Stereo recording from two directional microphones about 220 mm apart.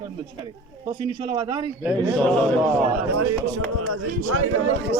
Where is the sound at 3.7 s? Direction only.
70° right (ahead or behind).